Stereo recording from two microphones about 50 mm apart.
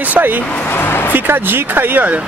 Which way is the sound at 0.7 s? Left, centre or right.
Left.